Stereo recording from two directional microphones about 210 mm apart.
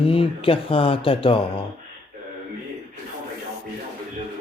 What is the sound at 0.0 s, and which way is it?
Speech, 25° left (ahead or behind).